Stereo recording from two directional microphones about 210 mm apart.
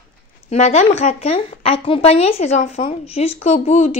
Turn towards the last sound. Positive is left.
turn(degrees=30)  # may be behind; listen again after turning